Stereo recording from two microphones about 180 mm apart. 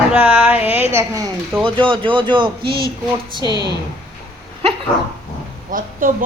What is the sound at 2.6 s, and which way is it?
A woman's voice, 60° right (ahead or behind).